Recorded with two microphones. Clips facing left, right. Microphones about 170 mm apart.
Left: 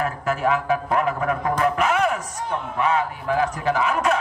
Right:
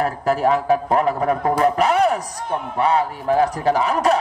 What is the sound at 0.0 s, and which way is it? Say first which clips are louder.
Speech: right 4 dB; 35° right (ahead or behind).